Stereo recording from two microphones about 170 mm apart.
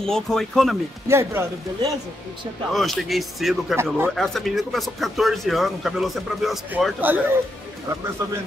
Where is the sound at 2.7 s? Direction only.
Centre (ahead or behind).